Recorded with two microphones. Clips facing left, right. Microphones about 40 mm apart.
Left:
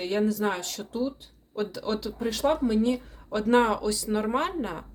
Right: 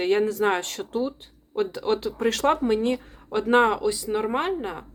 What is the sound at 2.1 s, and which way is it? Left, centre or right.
Speech, right.